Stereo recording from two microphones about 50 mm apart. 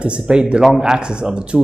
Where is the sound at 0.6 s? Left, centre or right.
Centre.